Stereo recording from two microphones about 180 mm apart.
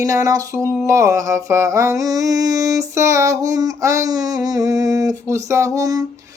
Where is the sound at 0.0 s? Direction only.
20° right (ahead or behind).